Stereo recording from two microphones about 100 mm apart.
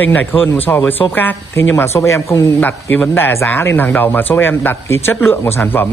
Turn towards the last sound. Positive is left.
turn(degrees=20)  # may be behind; listen again after turning